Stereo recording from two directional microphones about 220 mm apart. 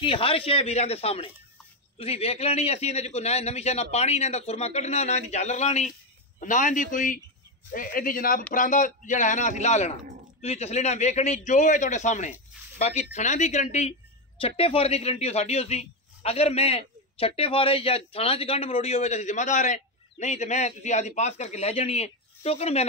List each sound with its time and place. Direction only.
0.0 s a man's voice: 25° left (ahead or behind)